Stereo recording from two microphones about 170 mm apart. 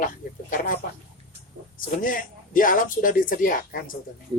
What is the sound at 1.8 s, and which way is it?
A man's voice, 55° left (ahead or behind).